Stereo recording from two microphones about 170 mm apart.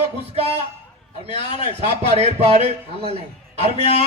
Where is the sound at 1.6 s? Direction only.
40° right (ahead or behind).